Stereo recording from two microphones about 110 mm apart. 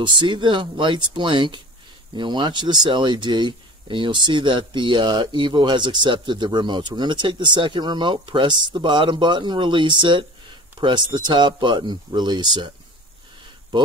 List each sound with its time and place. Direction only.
0.0 s speech: 45° right (ahead or behind)